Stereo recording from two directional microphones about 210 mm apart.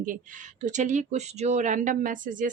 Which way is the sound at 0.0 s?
40° right (ahead or behind).